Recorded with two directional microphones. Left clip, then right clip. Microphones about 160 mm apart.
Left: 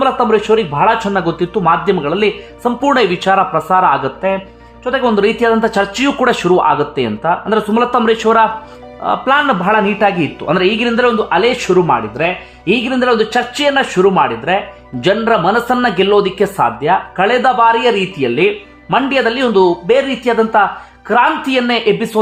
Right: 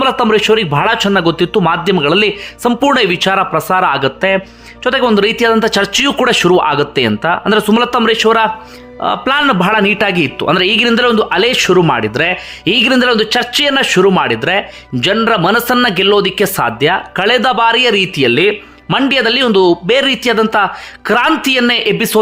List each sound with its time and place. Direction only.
0.0 s speech: 25° right (ahead or behind)